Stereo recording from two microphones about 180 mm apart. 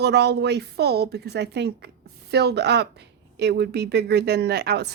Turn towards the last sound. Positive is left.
turn(degrees=-65)  # may be behind; listen again after turning